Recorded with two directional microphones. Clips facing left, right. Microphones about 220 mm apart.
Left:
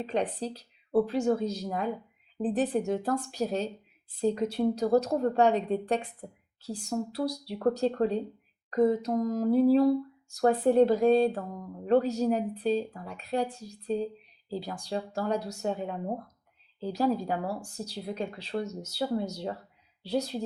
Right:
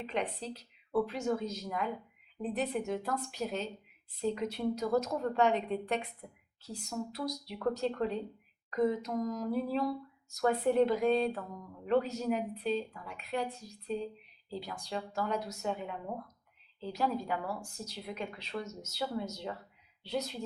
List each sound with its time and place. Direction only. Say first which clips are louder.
0.0 s speech: left 6 dB; 35° left (ahead or behind)